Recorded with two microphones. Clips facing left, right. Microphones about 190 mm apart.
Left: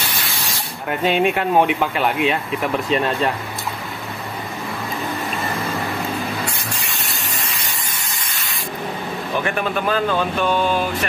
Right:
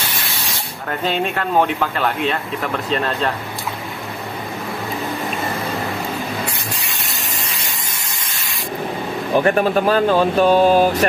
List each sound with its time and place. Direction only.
0.8 s speech: 10° left (ahead or behind)
9.4 s speech: 35° right (ahead or behind)